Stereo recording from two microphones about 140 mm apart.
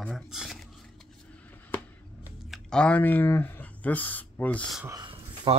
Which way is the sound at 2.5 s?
5° left (ahead or behind).